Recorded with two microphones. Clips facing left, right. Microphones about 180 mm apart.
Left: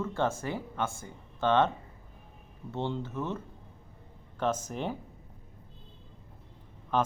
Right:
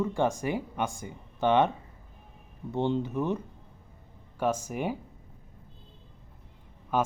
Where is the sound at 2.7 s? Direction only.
15° right (ahead or behind).